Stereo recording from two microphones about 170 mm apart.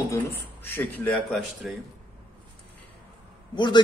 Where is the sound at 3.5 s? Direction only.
25° left (ahead or behind).